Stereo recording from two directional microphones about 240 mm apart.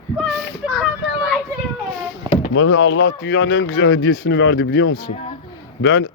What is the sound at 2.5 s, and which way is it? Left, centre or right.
Speech, left.